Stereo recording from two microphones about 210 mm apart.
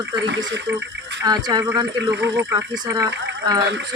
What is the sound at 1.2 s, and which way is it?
Speech, 20° right (ahead or behind).